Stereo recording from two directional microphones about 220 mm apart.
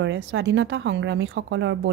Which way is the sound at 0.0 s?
55° right (ahead or behind).